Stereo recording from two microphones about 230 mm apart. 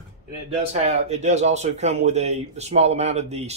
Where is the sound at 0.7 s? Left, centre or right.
Right.